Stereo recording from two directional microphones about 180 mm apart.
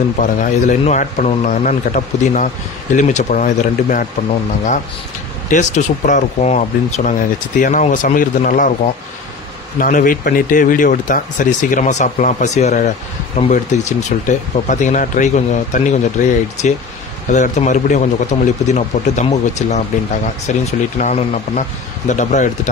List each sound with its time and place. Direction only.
0.2 s a man's voice: 40° left (ahead or behind)
5.5 s a man's voice: 40° left (ahead or behind)
9.8 s a man's voice: 50° left (ahead or behind)